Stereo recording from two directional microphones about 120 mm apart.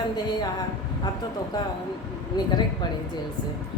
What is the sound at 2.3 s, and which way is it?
Speech, 35° left (ahead or behind).